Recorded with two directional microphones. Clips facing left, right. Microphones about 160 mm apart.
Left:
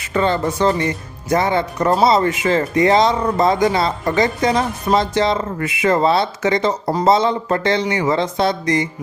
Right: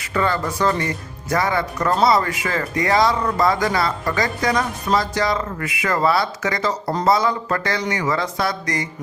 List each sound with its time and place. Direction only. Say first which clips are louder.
0.1 s speech: left 4 dB; 25° left (ahead or behind)